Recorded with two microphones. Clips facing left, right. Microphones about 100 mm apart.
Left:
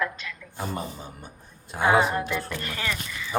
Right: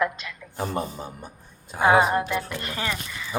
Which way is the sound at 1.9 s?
35° right (ahead or behind).